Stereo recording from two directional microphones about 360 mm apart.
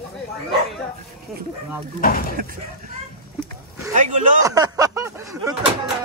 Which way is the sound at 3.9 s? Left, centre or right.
Right.